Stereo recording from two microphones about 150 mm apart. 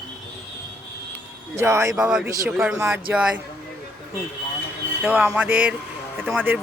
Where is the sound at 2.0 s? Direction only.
5° right (ahead or behind).